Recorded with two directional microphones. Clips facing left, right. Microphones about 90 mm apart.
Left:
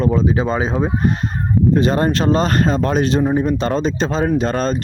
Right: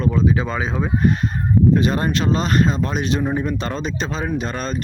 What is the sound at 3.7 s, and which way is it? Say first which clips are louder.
Speech: left 6 dB; 35° left (ahead or behind).